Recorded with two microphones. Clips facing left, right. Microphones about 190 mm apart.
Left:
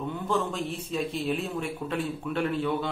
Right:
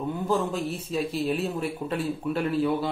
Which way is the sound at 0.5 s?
5° right (ahead or behind).